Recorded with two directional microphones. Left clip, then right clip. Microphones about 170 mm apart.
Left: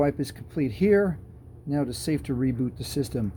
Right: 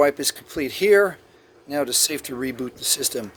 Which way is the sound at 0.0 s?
25° right (ahead or behind).